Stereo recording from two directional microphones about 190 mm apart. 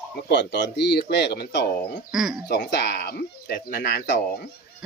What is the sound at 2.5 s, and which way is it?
Speech, 65° left (ahead or behind).